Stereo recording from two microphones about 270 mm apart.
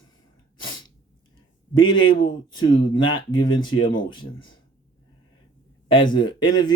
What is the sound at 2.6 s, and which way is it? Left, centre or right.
Speech, centre.